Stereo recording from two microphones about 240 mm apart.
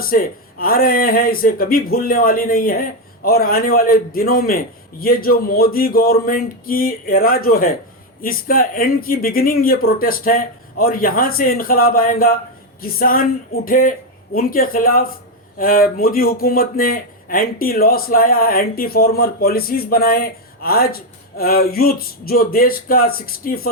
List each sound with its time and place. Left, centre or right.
0.0 s a man's voice: left